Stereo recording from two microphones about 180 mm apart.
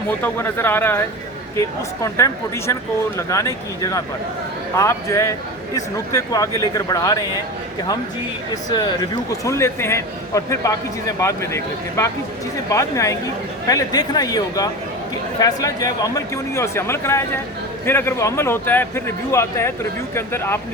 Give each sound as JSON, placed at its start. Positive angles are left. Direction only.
{"t": 0.2, "sound": "a man's voice", "side_deg": 15}
{"t": 8.7, "sound": "a man's voice", "side_deg": 25}